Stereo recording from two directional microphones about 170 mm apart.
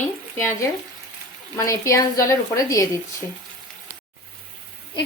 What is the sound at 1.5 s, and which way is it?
A woman's voice, 20° left (ahead or behind).